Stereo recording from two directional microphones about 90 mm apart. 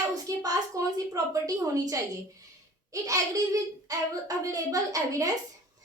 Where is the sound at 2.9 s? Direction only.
40° right (ahead or behind).